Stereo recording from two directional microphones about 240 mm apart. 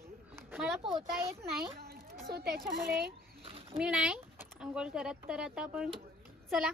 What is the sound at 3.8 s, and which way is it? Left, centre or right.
A child's voice, centre.